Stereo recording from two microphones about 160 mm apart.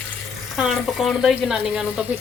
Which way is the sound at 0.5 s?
Centre (ahead or behind).